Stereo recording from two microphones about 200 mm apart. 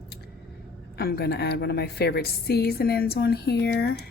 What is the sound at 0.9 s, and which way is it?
A woman's voice, 55° left (ahead or behind).